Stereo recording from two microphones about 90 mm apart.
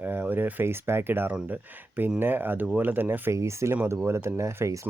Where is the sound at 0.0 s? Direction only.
20° right (ahead or behind).